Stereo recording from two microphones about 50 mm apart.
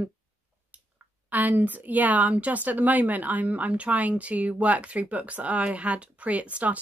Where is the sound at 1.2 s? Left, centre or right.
Right.